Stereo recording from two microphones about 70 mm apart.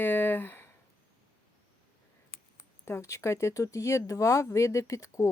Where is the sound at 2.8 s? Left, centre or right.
Left.